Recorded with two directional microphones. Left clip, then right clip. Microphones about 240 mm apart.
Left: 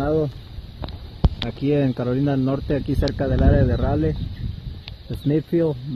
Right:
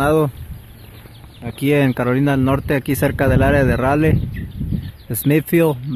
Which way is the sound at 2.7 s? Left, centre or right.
Centre.